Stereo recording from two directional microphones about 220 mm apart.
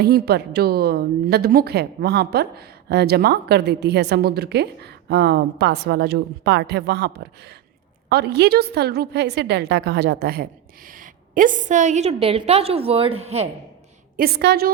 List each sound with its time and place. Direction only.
0.0 s a woman's voice: 45° right (ahead or behind); by 13.5 s 30° right (ahead or behind)
14.2 s a woman's voice: 45° right (ahead or behind)